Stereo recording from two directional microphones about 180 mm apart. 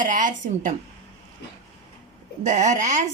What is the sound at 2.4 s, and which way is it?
Speech, 40° right (ahead or behind).